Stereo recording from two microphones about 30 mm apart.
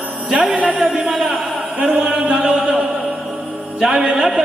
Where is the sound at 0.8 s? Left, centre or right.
Right.